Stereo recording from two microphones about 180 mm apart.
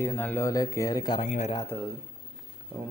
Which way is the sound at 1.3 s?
40° left (ahead or behind).